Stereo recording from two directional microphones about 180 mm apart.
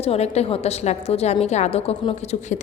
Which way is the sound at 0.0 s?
35° left (ahead or behind).